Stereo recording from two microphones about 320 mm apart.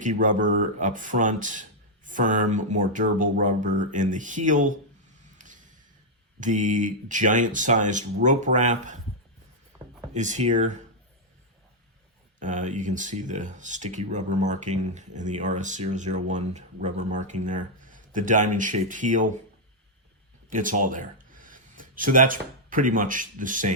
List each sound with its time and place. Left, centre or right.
0.0 s speech: right
5.4 s a sound: right
6.4 s speech: right
10.2 s speech: right
12.4 s speech: right
20.5 s speech: right